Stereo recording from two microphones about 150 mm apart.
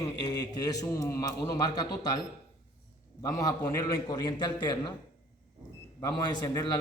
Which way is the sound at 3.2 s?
25° left (ahead or behind).